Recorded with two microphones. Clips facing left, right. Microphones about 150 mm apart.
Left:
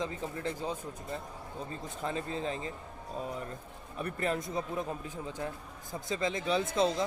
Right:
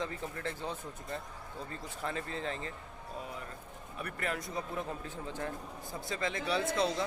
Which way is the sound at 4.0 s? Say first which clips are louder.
Left 5 dB; 30° left (ahead or behind).